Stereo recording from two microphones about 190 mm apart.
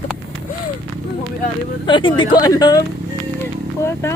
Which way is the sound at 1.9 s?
25° left (ahead or behind).